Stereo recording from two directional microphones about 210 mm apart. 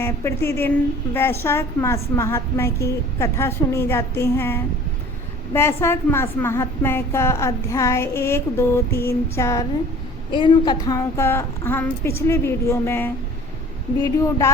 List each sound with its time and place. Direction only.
0.0 s a woman's voice: 10° left (ahead or behind)